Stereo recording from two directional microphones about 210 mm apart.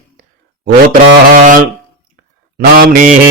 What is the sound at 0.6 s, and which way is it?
Mantra, 40° right (ahead or behind).